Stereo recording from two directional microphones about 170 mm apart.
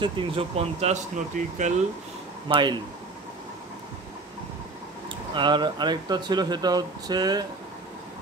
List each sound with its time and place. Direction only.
0.0 s speech: 35° right (ahead or behind)
2.4 s speech: 30° right (ahead or behind)
5.3 s speech: 25° right (ahead or behind)